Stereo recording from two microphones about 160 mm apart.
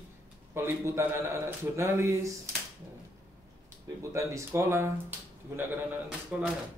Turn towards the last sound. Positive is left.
turn(degrees=-10)  # may be behind; listen again after turning